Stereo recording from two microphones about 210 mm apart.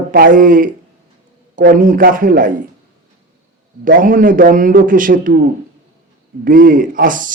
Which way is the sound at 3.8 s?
40° right (ahead or behind).